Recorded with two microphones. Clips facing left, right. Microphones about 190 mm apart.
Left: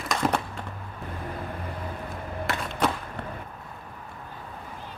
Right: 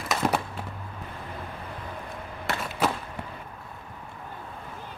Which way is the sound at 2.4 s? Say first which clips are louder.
Even; 5° right (ahead or behind).